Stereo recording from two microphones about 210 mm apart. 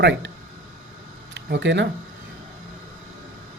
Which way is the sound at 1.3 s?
60° right (ahead or behind).